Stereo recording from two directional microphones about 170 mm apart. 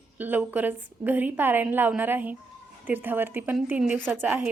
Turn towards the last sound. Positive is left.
turn(degrees=-10)  # may be behind; listen again after turning